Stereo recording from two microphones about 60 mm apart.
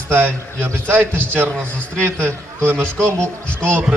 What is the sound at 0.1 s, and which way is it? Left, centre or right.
A man's voice, right.